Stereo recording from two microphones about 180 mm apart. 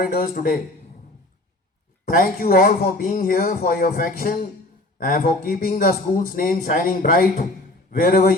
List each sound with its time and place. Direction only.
0.0 s speech: 55° left (ahead or behind)
2.0 s speech: 55° left (ahead or behind)